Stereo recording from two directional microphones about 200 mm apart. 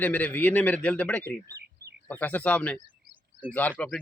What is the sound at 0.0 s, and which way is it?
A man's voice, 10° left (ahead or behind).